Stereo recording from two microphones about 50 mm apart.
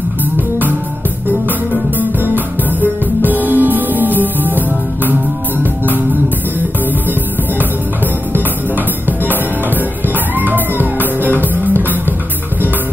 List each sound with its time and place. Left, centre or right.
2.0 s music: right
8.3 s music: right